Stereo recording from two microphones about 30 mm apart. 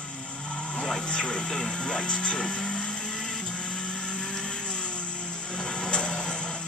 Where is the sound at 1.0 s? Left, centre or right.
Left.